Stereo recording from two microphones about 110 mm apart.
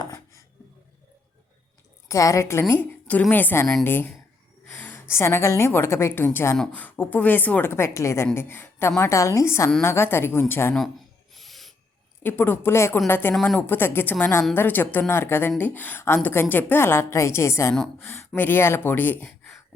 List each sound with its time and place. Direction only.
0.0 s a sound: 30° left (ahead or behind)
2.0 s a woman's voice: 30° left (ahead or behind)
11.3 s filing: centre (ahead or behind)
12.2 s a woman's voice: 20° left (ahead or behind)